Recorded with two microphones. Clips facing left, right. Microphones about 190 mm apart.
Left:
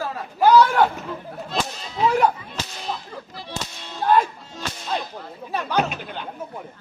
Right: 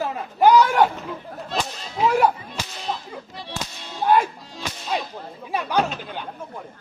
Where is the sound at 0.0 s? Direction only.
15° right (ahead or behind).